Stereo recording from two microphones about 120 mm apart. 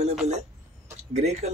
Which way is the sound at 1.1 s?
70° right (ahead or behind).